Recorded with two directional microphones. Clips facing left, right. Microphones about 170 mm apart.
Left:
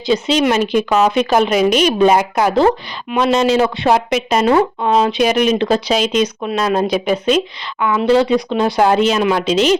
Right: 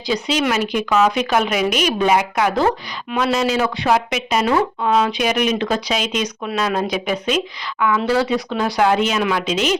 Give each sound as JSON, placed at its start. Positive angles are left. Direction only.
{"t": 0.1, "sound": "a woman's voice", "side_deg": 25}
{"t": 3.1, "sound": "a woman's voice", "side_deg": 20}